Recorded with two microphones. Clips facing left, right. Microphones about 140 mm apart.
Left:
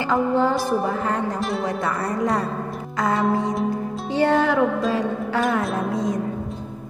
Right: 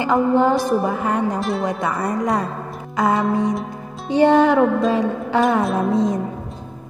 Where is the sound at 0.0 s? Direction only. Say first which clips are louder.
Right 3 dB; 15° right (ahead or behind).